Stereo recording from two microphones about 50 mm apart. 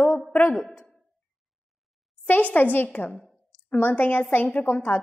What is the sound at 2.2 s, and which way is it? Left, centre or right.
A woman's voice, left.